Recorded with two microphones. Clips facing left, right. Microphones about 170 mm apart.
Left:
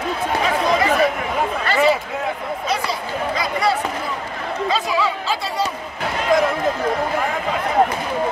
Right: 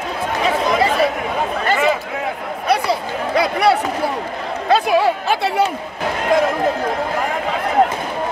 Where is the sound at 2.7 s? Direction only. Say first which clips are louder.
Right 7 dB; 65° right (ahead or behind).